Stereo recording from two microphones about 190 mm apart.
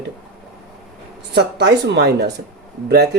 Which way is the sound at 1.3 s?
65° right (ahead or behind).